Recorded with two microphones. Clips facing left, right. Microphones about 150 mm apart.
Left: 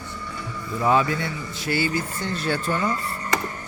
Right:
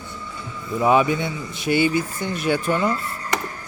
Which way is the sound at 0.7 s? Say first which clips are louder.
Right 3 dB; 20° right (ahead or behind).